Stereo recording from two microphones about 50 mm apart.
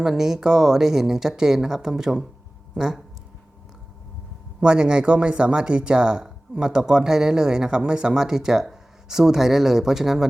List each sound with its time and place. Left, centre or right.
0.0 s speech: centre
4.6 s speech: centre